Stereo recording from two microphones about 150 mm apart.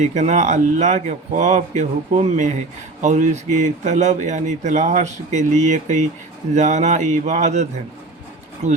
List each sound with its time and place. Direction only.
0.0 s speech: 50° right (ahead or behind)